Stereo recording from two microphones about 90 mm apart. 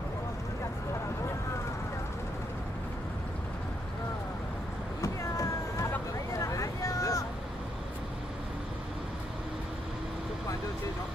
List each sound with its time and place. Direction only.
5.0 s vehicle: 35° left (ahead or behind)